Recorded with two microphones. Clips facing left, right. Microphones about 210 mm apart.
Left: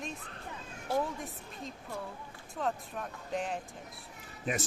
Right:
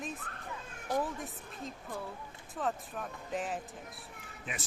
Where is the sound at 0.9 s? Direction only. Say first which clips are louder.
Left 1 dB; 15° right (ahead or behind).